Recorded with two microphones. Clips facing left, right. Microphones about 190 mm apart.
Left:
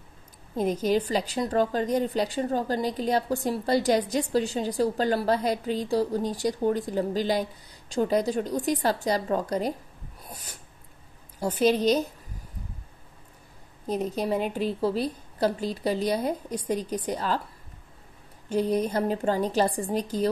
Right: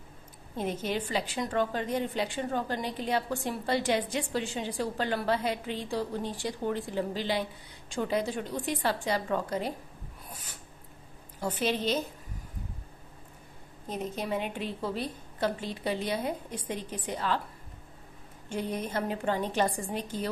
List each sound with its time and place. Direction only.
0.6 s a woman's voice: 40° left (ahead or behind)
11.3 s a woman's voice: 40° left (ahead or behind)
13.8 s a woman's voice: 35° left (ahead or behind)
18.5 s a woman's voice: 35° left (ahead or behind)